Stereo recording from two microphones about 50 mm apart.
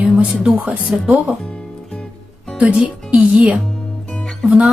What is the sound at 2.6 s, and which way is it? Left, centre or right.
Speech, right.